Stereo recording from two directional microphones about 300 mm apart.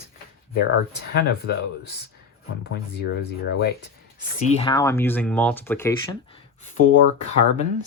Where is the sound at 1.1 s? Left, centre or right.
Left.